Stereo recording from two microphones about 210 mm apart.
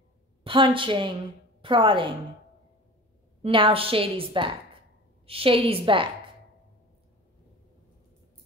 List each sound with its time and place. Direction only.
0.4 s a woman's voice: 25° right (ahead or behind)
3.4 s a woman's voice: 25° right (ahead or behind)